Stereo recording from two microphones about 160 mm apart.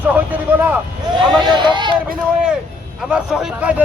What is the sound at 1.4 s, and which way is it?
Speech, 30° right (ahead or behind).